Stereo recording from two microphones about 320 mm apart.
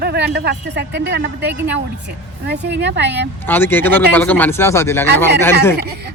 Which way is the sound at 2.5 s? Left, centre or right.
Right.